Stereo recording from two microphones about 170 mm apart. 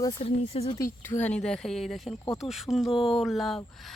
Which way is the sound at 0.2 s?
35° left (ahead or behind).